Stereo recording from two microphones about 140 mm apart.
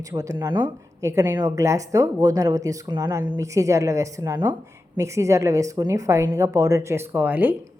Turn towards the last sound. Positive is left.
turn(degrees=-15)  # may be behind; listen again after turning